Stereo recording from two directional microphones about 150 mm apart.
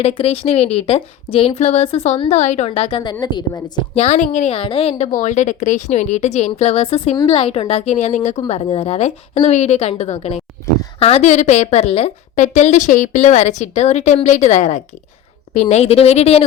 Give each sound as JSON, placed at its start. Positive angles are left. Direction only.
{"t": 0.0, "sound": "a woman's voice", "side_deg": 40}
{"t": 3.9, "sound": "a woman's voice", "side_deg": 45}
{"t": 5.1, "sound": "a woman's voice", "side_deg": 55}